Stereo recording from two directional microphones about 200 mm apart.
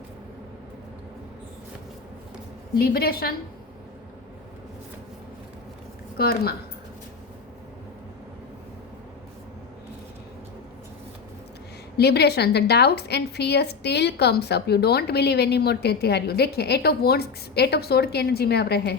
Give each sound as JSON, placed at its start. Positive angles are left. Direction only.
{"t": 2.7, "sound": "a woman's voice", "side_deg": 50}
{"t": 6.1, "sound": "a woman's voice", "side_deg": 50}
{"t": 11.9, "sound": "a woman's voice", "side_deg": 55}